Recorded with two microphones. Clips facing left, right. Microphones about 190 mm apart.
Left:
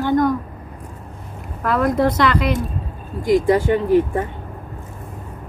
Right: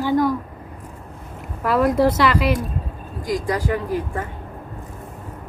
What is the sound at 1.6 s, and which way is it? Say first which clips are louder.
Speech: right 1 dB; 5° right (ahead or behind).